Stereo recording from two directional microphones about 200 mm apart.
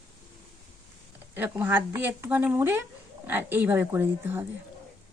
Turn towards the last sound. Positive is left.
turn(degrees=-10)  # may be behind; listen again after turning